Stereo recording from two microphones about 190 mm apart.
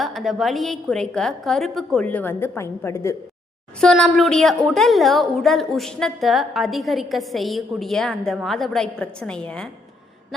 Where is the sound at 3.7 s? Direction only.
5° left (ahead or behind).